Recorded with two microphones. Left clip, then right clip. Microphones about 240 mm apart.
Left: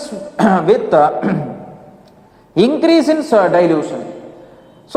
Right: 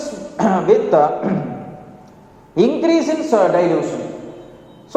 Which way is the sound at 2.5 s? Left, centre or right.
Left.